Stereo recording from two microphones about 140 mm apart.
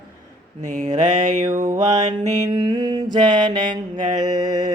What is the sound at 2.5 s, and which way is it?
Mantra, 30° right (ahead or behind).